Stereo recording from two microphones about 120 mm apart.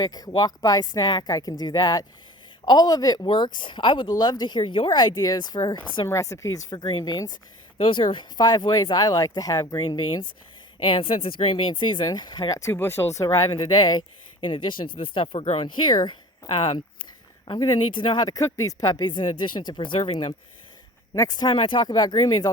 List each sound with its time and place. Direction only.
0.0 s speech: 30° left (ahead or behind)
6.1 s speech: 25° left (ahead or behind)
7.8 s speech: 45° left (ahead or behind)
21.2 s speech: 35° left (ahead or behind)